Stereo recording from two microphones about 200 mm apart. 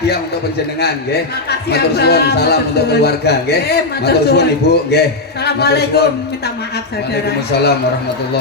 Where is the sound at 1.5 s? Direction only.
55° left (ahead or behind).